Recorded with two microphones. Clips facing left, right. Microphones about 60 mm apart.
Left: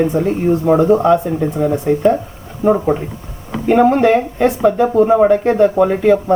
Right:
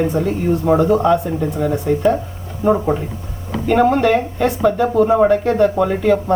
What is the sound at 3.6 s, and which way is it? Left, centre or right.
Speech, centre.